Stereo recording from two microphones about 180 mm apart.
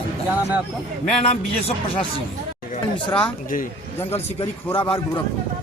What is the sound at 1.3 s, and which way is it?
Speech, 35° left (ahead or behind).